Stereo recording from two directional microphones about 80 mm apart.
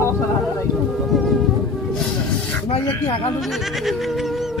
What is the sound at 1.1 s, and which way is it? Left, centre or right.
Music, centre.